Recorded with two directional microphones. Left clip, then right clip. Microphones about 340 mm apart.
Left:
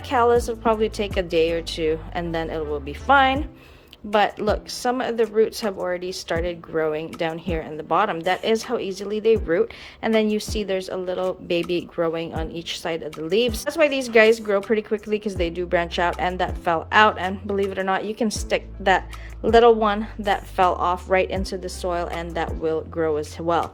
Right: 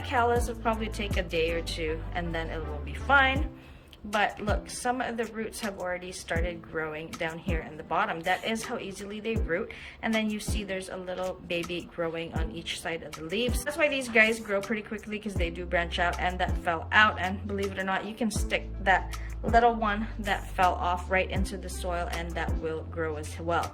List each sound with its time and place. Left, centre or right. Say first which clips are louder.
0.1 s speech: left 8 dB; centre